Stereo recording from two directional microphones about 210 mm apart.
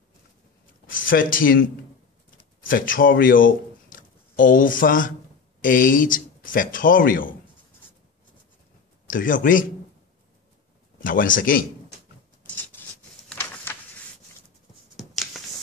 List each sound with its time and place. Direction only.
0.8 s speech: 40° left (ahead or behind)
2.6 s speech: 40° left (ahead or behind)
9.0 s speech: 40° left (ahead or behind)
11.0 s speech: 40° left (ahead or behind)
12.4 s a sound: 5° left (ahead or behind)
15.0 s finger snapping: centre (ahead or behind)